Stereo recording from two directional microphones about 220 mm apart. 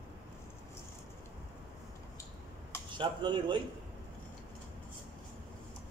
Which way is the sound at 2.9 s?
20° right (ahead or behind).